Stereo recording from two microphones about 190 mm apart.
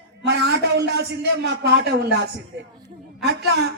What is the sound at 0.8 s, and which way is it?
A man's voice, 60° right (ahead or behind).